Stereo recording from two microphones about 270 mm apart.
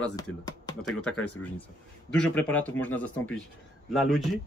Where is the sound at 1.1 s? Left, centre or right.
Left.